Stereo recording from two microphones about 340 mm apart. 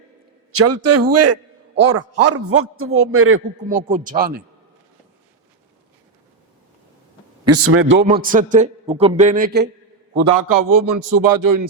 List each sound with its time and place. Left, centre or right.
0.5 s a man's voice: right
3.6 s a man's voice: right
7.4 s a man's voice: right
10.2 s a man's voice: right